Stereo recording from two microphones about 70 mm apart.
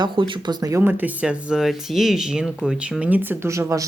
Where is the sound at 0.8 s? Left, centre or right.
Right.